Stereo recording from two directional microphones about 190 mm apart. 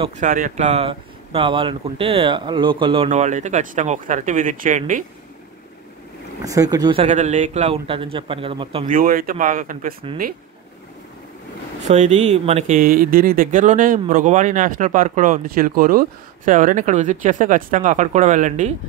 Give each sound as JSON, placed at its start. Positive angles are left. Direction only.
{"t": 0.2, "sound": "speech", "side_deg": -45}
{"t": 3.1, "sound": "speech", "side_deg": -40}
{"t": 6.4, "sound": "speech", "side_deg": -20}
{"t": 7.1, "sound": "speech", "side_deg": -40}
{"t": 8.8, "sound": "speech", "side_deg": -45}
{"t": 11.9, "sound": "speech", "side_deg": -35}